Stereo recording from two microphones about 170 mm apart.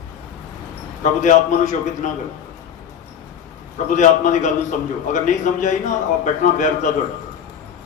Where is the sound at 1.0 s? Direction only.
45° left (ahead or behind).